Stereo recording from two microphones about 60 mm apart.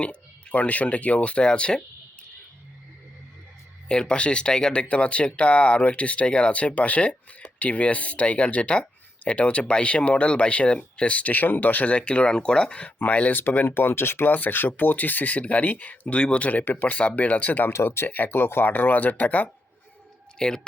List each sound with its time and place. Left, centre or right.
0.0 s speech: centre
3.8 s speech: centre
17.7 s speech: left
20.4 s speech: centre